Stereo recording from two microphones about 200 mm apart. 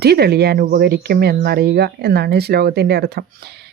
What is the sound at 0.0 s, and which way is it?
Speech, 55° right (ahead or behind).